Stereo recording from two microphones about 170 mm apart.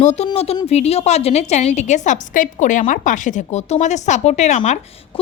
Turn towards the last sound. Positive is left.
turn(degrees=45)  # may be behind; listen again after turning